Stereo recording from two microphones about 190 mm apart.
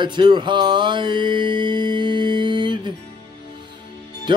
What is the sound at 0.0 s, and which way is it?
Mantra, 25° right (ahead or behind).